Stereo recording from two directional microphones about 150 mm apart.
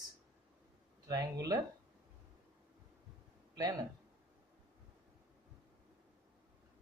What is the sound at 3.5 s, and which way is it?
Speech, 25° right (ahead or behind).